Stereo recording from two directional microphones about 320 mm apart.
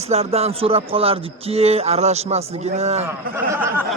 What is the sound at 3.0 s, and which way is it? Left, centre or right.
Speech, centre.